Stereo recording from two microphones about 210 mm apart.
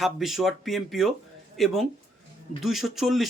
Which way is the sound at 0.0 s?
Centre (ahead or behind).